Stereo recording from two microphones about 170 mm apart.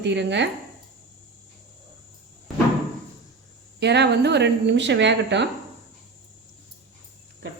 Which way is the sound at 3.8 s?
85° right.